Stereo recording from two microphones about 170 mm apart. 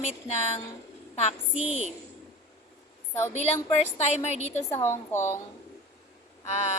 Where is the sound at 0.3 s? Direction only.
40° left (ahead or behind).